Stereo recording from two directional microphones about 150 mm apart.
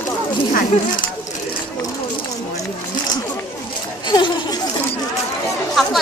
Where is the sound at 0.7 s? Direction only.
50° left (ahead or behind).